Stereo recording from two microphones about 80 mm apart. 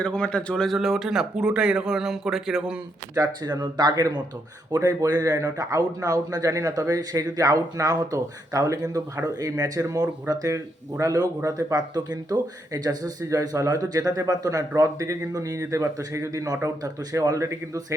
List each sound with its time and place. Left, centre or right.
0.0 s a man's voice: centre
0.8 s speech: centre
3.2 s speech: right
4.7 s speech: right